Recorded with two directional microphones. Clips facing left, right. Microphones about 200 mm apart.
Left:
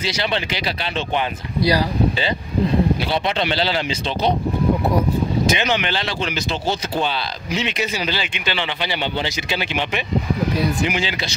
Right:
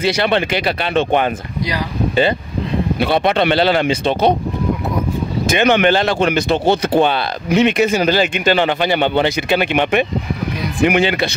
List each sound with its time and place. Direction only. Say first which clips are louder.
0.0 s speech: right 7 dB; 55° right (ahead or behind)
3.0 s speech: right 6 dB; 55° right (ahead or behind)
5.5 s a man's voice: right 8 dB; 55° right (ahead or behind)